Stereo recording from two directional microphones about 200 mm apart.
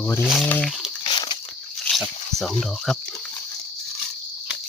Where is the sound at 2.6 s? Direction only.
Centre (ahead or behind).